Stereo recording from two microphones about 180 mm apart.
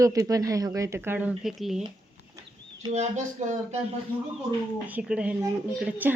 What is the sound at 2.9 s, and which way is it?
Speech, 40° right (ahead or behind).